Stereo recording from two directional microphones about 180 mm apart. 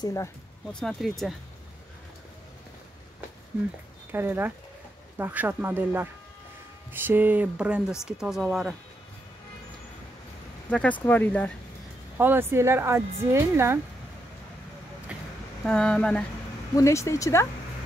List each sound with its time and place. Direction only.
0.0 s speech: 15° left (ahead or behind)
0.7 s speech: centre (ahead or behind)
4.1 s speech: 10° right (ahead or behind)
10.7 s speech: 10° left (ahead or behind)
12.2 s speech: 10° right (ahead or behind)
15.1 s a sound: 5° right (ahead or behind)
15.6 s speech: 5° left (ahead or behind)
16.7 s speech: 15° left (ahead or behind)